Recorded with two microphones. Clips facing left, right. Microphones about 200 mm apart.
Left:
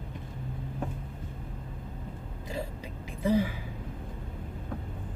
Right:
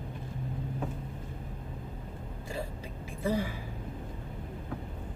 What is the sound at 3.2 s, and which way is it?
Speech, 15° left (ahead or behind).